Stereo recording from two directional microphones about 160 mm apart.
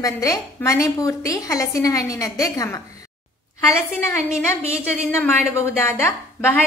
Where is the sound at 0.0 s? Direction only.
20° left (ahead or behind).